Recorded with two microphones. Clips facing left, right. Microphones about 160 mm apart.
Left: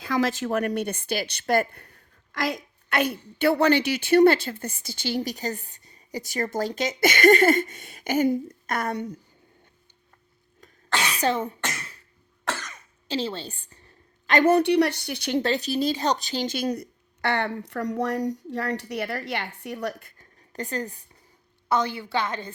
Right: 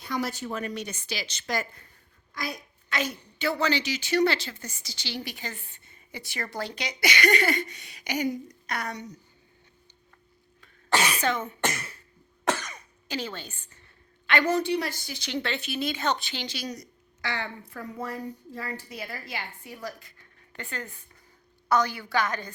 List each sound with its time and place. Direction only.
0.0 s speech: 90° left; by 1.9 s 60° left (ahead or behind)
2.3 s a woman's voice: 90° left; by 9.1 s 55° left (ahead or behind)
11.2 s speech: 35° left (ahead or behind)
12.5 s cough: 15° right (ahead or behind)
13.1 s a woman's voice: 30° left (ahead or behind)
14.4 s speech: 65° left (ahead or behind)
15.4 s speech: 40° left (ahead or behind)
21.7 s a woman's voice: 25° left (ahead or behind)